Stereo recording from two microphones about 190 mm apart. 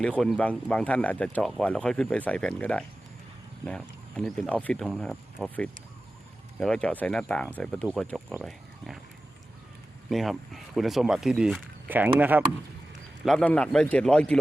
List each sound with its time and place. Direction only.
0.0 s speech: 5° left (ahead or behind)
10.1 s speech: centre (ahead or behind)
13.2 s speech: 5° left (ahead or behind)